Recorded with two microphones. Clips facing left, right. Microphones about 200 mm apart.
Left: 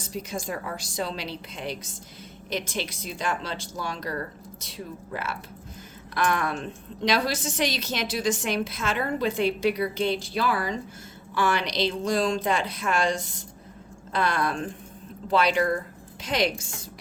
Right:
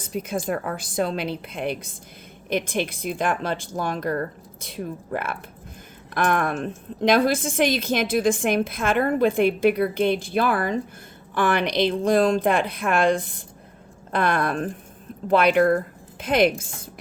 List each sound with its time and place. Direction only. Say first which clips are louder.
0.0 s a woman's voice: right 5 dB; 55° right (ahead or behind)